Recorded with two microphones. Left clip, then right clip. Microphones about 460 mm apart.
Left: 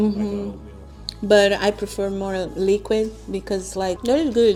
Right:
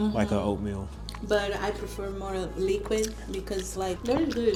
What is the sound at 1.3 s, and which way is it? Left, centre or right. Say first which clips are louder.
Speech: left 12 dB; left.